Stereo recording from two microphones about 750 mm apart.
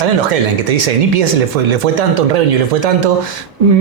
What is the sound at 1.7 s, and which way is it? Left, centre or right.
Speech, right.